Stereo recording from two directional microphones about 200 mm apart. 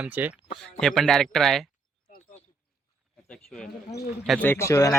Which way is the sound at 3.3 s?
5° left (ahead or behind).